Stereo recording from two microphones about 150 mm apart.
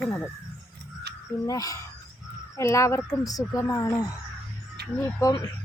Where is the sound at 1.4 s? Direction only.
20° left (ahead or behind).